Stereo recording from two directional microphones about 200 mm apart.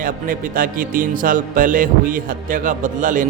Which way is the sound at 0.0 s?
45° right (ahead or behind).